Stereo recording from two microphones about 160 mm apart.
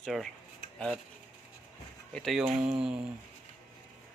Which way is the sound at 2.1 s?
Centre (ahead or behind).